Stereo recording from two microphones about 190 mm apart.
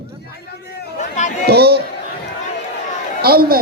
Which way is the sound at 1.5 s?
55° right (ahead or behind).